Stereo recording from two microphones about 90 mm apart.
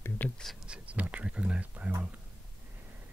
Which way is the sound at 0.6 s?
15° right (ahead or behind).